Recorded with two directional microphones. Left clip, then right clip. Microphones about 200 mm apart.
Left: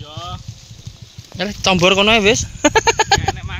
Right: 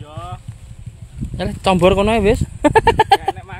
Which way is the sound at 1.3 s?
5° right (ahead or behind).